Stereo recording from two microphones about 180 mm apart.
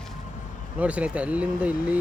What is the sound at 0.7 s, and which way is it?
Speech, 5° right (ahead or behind).